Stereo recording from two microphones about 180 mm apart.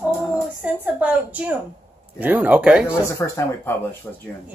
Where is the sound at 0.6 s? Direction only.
10° right (ahead or behind).